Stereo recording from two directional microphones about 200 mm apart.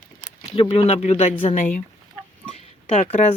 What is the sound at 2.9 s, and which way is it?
Speech, 30° left (ahead or behind).